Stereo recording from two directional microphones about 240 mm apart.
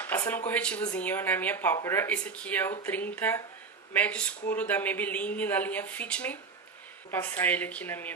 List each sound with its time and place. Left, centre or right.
0.0 s speech: centre